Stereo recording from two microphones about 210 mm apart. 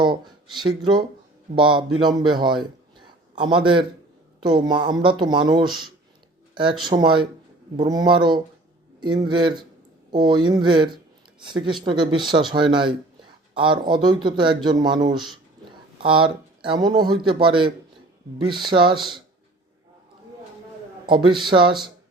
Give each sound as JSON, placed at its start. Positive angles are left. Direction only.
{"t": 0.6, "sound": "speech", "side_deg": -20}
{"t": 3.0, "sound": "a sound", "side_deg": -20}
{"t": 4.4, "sound": "speech", "side_deg": -20}
{"t": 18.9, "sound": "speech", "side_deg": 0}
{"t": 21.1, "sound": "speech", "side_deg": -25}